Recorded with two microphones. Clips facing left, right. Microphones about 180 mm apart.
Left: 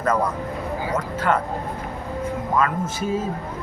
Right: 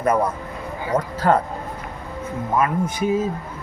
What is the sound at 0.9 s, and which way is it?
Speech, 35° right (ahead or behind).